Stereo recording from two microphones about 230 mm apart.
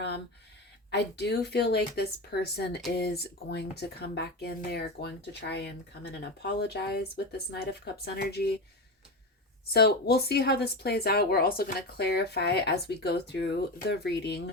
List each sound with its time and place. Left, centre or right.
0.9 s speech: left
9.7 s speech: left